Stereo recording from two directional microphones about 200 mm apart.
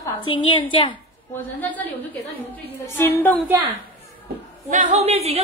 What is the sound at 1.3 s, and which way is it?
A woman's voice, 10° left (ahead or behind).